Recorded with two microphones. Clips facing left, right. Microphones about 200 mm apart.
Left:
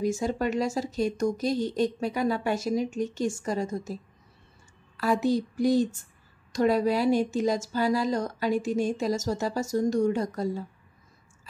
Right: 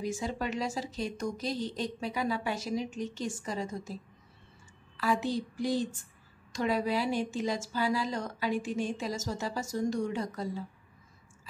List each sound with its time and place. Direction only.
0.0 s speech: 45° left (ahead or behind)
4.9 s speech: 45° left (ahead or behind)